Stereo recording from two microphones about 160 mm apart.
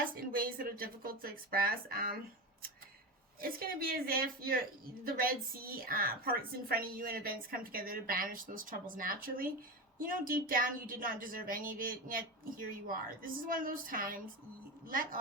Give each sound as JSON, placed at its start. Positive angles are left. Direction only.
{"t": 0.3, "sound": "a woman's voice", "side_deg": -65}